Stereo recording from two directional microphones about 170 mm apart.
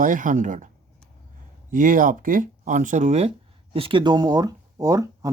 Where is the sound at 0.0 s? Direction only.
50° right (ahead or behind).